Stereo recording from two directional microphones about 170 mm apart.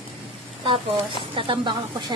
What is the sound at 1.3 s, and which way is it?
Speech, 30° right (ahead or behind).